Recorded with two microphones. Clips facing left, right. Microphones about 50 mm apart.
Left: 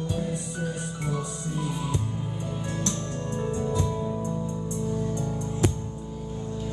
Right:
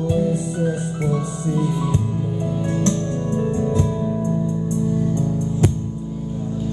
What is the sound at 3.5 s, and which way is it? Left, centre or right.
Music, right.